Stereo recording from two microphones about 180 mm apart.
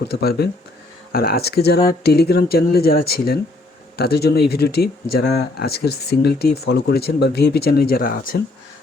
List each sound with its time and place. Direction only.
0.0 s speech: 60° left (ahead or behind)